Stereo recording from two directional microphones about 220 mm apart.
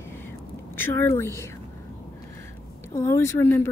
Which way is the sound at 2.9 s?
15° left (ahead or behind).